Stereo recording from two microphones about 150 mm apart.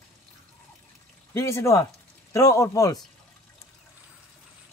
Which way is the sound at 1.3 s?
20° left (ahead or behind).